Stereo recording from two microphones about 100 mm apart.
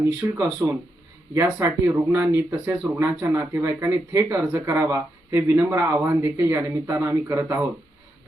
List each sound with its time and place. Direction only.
0.0 s speech: 30° right (ahead or behind)